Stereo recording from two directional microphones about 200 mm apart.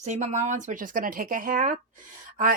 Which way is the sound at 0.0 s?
35° right (ahead or behind).